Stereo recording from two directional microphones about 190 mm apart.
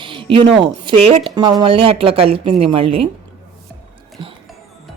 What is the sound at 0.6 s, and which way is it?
A woman's voice, 25° right (ahead or behind).